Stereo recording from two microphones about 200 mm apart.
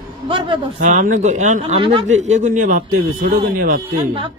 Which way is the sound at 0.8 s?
40° right (ahead or behind).